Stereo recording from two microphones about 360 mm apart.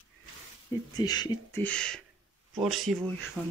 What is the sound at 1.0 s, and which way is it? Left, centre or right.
Speech, centre.